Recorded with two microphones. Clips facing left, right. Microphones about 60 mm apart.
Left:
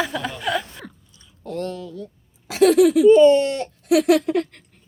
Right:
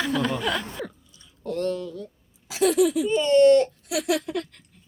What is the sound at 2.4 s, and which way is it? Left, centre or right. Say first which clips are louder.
Speech: left 6 dB; left.